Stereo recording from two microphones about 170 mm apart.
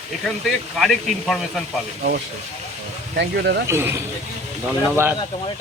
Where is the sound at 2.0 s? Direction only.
70° right (ahead or behind).